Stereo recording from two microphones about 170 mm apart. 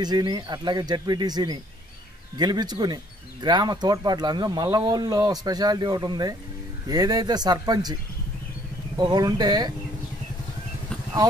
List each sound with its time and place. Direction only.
0.0 s speech: 25° right (ahead or behind)
8.9 s speech: 25° right (ahead or behind)